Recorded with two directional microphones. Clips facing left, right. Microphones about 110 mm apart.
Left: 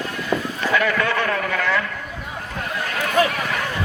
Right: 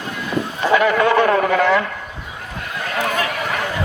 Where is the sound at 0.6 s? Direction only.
25° right (ahead or behind).